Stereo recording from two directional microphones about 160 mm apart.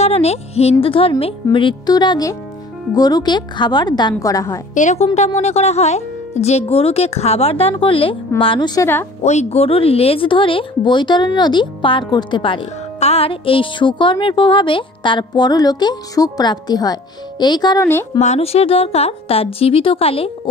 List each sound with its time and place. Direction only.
0.0 s speech: 40° left (ahead or behind); by 4.6 s 20° left (ahead or behind)
4.7 s speech: 45° left (ahead or behind); by 8.8 s 25° left (ahead or behind)
9.2 s speech: 45° left (ahead or behind); by 17.8 s 25° left (ahead or behind)
18.2 s speech: 40° left (ahead or behind)